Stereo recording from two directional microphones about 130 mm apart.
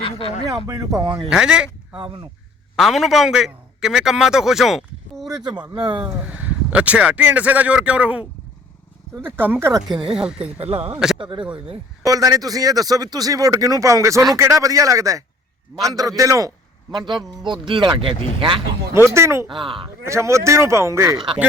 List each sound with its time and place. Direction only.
0.0 s speech: 45° left (ahead or behind)
0.4 s speech: 25° right (ahead or behind)
1.3 s speech: 5° right (ahead or behind)
2.0 s speech: 40° right (ahead or behind)
2.7 s a man's voice: centre (ahead or behind)
5.4 s speech: 35° right (ahead or behind)
6.2 s speech: 10° right (ahead or behind)
10.1 s speech: 5° right (ahead or behind)
10.6 s speech: 50° right (ahead or behind)
12.0 s speech: 25° right (ahead or behind)
17.1 s speech: 35° right (ahead or behind)
19.1 s speech: 20° right (ahead or behind)
19.5 s speech: 40° right (ahead or behind)
20.1 s speech: 20° right (ahead or behind)